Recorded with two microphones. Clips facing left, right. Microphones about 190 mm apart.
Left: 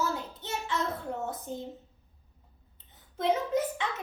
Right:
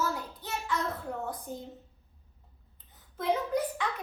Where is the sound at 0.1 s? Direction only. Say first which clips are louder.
Left 1 dB; 25° left (ahead or behind).